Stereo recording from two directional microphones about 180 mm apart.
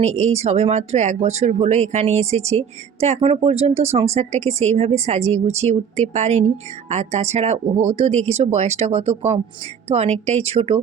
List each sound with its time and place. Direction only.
0.0 s speech: 40° right (ahead or behind)